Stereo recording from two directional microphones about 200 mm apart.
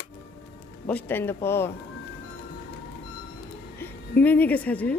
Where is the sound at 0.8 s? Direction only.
10° left (ahead or behind).